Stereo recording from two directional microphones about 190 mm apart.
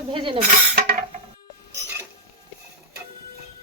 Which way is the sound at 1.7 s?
15° right (ahead or behind).